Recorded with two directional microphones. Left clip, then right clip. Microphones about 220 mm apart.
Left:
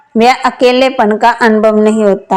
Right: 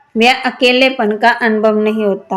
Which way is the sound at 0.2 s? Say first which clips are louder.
Left 3 dB; 25° left (ahead or behind).